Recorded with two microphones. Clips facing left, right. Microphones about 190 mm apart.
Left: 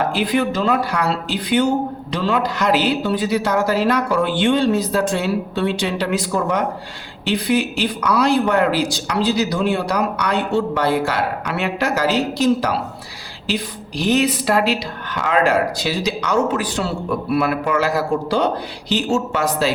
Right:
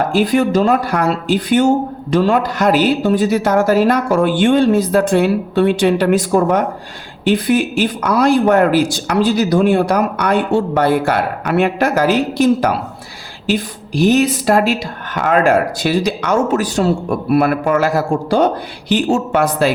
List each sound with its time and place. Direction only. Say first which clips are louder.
0.0 s speech: right 5 dB; 45° right (ahead or behind)